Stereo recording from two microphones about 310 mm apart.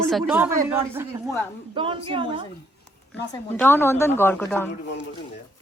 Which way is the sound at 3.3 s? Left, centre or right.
Centre.